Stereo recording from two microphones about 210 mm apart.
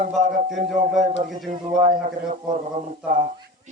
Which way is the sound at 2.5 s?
35° right (ahead or behind).